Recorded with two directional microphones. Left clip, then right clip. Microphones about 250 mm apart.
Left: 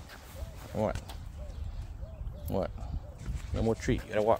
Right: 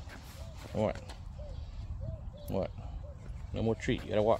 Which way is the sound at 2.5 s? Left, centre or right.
Centre.